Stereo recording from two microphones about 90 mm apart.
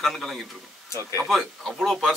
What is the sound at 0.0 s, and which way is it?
Speech, centre (ahead or behind).